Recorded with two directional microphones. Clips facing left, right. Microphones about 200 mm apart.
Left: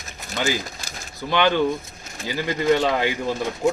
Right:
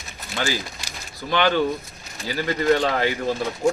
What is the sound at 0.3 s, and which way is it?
Speech, 20° left (ahead or behind).